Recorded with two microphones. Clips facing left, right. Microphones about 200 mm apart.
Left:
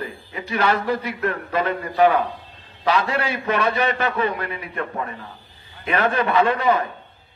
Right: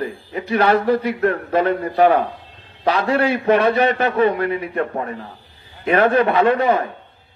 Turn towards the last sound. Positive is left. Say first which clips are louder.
# right 4 dB
turn(degrees=-55)  # may be behind; listen again after turning